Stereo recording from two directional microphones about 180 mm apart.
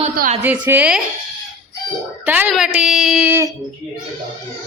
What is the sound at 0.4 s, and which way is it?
Speech, 10° right (ahead or behind).